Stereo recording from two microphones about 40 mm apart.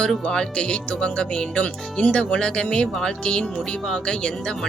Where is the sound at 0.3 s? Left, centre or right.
Left.